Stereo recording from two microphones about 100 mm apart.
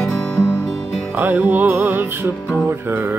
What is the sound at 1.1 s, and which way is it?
Music, 20° right (ahead or behind).